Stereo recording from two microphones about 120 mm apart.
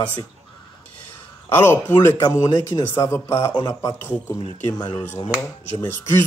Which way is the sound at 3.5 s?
35° left (ahead or behind).